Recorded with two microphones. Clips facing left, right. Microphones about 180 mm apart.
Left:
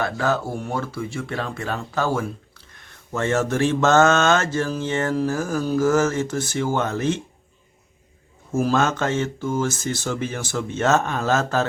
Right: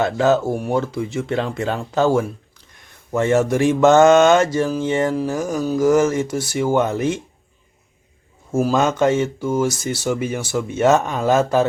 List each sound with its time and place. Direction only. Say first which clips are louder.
0.0 s speech: right 6 dB; 20° right (ahead or behind)
8.6 s speech: right 4 dB; 15° right (ahead or behind)